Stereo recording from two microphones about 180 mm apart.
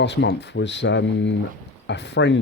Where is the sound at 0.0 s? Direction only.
75° left (ahead or behind).